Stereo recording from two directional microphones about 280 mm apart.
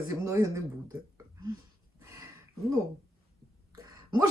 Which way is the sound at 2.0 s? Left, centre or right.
Centre.